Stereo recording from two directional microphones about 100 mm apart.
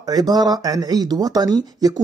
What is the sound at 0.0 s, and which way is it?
Speech, 40° right (ahead or behind).